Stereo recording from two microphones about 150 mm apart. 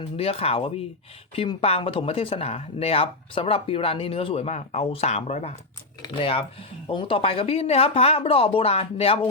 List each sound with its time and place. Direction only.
0.0 s speech: 40° left (ahead or behind)